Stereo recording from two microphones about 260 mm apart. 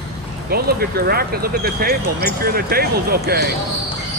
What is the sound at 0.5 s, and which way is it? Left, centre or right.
Speech, right.